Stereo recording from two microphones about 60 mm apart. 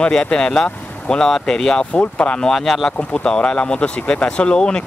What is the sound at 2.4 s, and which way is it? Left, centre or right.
Speech, centre.